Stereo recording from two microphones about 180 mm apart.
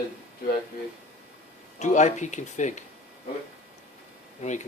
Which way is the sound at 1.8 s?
40° left (ahead or behind).